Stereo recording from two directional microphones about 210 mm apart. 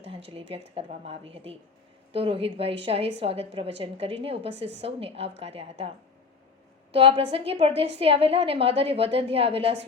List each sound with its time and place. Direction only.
0.3 s a woman's voice: 25° right (ahead or behind)
6.9 s a woman's voice: 25° right (ahead or behind)